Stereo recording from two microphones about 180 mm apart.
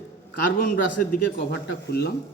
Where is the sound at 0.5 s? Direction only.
55° left (ahead or behind).